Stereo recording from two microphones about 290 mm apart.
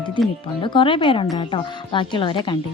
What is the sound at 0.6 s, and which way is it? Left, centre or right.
A woman's voice, centre.